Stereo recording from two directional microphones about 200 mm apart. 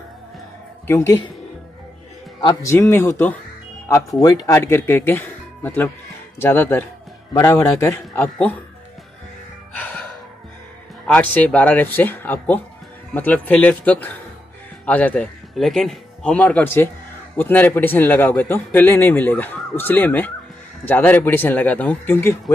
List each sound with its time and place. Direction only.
0.8 s a man's voice: 15° left (ahead or behind)
2.4 s a man's voice: 15° left (ahead or behind)
9.8 s music: 10° left (ahead or behind)
11.1 s a man's voice: 5° left (ahead or behind)